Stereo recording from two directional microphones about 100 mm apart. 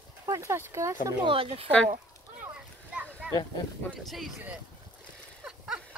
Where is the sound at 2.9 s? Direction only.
10° right (ahead or behind).